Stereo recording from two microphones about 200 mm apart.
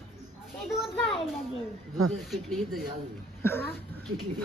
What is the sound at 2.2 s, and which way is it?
Speech, centre (ahead or behind).